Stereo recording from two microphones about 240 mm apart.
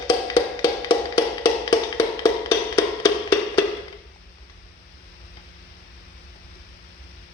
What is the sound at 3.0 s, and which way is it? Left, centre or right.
Music, centre.